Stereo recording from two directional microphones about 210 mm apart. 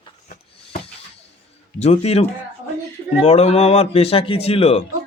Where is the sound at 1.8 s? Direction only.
30° left (ahead or behind).